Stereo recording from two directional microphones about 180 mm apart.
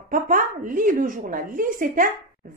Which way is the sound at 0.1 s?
50° right (ahead or behind).